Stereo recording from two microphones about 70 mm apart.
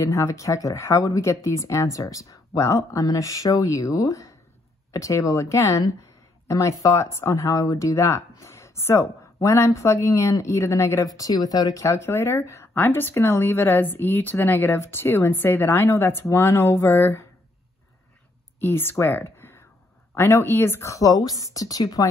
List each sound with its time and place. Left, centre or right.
0.0 s speech: left
11.1 s a woman's voice: left
18.6 s speech: left